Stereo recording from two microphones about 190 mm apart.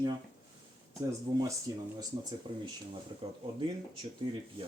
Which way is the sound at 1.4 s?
20° right (ahead or behind).